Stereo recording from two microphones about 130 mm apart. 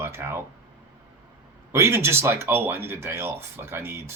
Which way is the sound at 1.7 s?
20° right (ahead or behind).